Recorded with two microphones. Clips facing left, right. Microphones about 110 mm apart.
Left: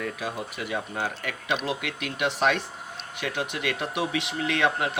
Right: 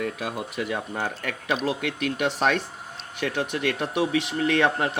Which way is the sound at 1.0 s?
45° right (ahead or behind).